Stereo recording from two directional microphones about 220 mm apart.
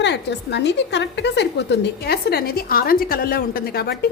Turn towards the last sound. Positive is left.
turn(degrees=45)  # may be behind; listen again after turning